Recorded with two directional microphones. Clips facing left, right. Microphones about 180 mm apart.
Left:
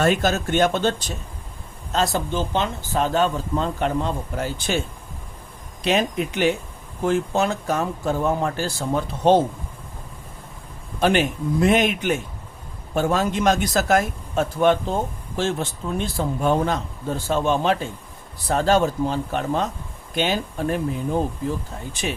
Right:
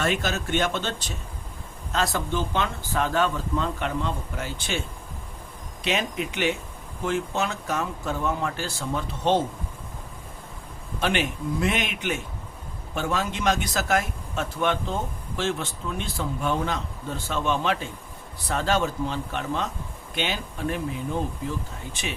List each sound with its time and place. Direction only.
0.0 s speech: 45° left (ahead or behind)
1.9 s speech: 25° left (ahead or behind)
5.8 s speech: 40° left (ahead or behind)
11.0 s speech: 40° left (ahead or behind)